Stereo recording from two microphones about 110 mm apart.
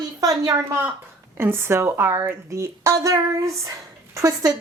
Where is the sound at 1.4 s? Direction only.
20° right (ahead or behind).